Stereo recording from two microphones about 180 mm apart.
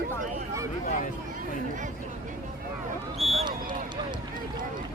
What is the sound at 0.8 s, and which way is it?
Speech, 45° left (ahead or behind).